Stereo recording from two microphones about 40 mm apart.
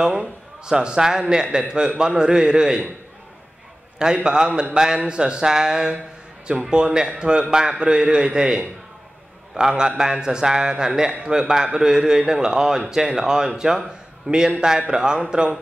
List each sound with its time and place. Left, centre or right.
0.0 s a man's voice: centre
4.0 s a man's voice: right